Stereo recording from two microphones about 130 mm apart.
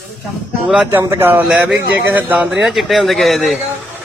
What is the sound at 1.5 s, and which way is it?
Speech, 5° right (ahead or behind).